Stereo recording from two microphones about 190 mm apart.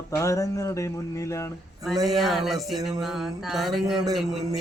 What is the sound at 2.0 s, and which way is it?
Music, centre (ahead or behind).